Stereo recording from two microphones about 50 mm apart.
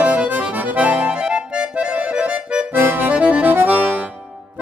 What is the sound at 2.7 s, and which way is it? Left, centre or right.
Accordion, right.